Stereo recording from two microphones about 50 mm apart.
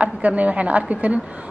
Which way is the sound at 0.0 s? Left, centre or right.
Right.